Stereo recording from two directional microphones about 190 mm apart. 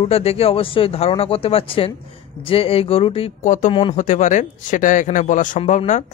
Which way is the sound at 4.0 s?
40° left (ahead or behind).